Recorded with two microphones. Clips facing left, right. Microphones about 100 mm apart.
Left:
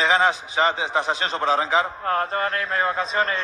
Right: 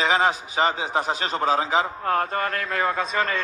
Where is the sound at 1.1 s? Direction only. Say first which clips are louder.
Right 1 dB; 45° right (ahead or behind).